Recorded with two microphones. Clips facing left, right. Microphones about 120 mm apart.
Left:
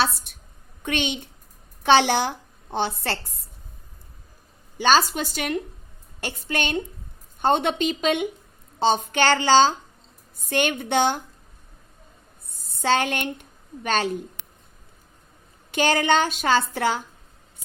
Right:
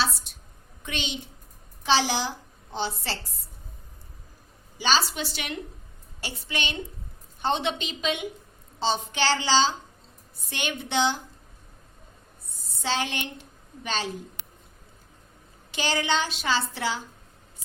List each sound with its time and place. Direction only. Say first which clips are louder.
0.0 s a sound: left 4 dB; 55° left (ahead or behind)
0.8 s a woman's voice: left 7 dB; 55° left (ahead or behind)
4.8 s a woman's voice: left 6 dB; 50° left (ahead or behind)
12.5 s a woman's voice: left 7 dB; 55° left (ahead or behind)
15.7 s a woman's voice: left 6 dB; 55° left (ahead or behind)